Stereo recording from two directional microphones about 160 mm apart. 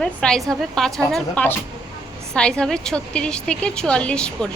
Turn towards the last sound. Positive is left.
turn(degrees=5)  # may be behind; listen again after turning